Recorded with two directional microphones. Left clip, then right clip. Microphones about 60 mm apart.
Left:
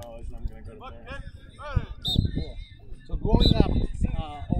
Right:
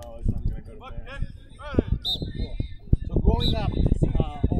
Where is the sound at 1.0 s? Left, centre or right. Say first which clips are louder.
Even; left.